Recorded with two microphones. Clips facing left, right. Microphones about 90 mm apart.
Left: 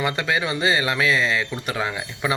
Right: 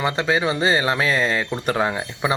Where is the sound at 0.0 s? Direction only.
25° right (ahead or behind).